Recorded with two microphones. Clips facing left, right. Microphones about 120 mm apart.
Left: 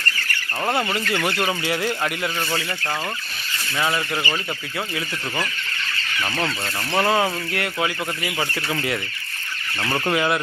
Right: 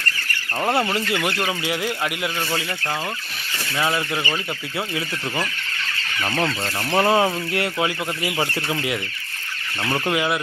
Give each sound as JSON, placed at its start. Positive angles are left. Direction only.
{"t": 0.9, "sound": "speech", "side_deg": -20}
{"t": 1.5, "sound": "speech", "side_deg": -5}
{"t": 6.7, "sound": "speech", "side_deg": -20}
{"t": 9.9, "sound": "speech", "side_deg": -5}